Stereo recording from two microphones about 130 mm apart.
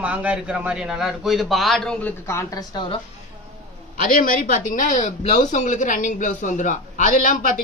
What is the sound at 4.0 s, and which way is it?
A man's voice, 90° left.